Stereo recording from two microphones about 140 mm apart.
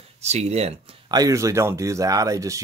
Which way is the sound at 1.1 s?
25° right (ahead or behind).